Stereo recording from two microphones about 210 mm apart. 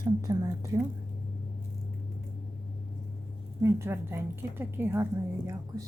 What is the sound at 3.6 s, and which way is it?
A woman's voice, 10° right (ahead or behind).